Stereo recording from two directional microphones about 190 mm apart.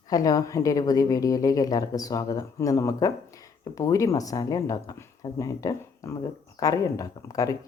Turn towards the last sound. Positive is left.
turn(degrees=20)  # may be behind; listen again after turning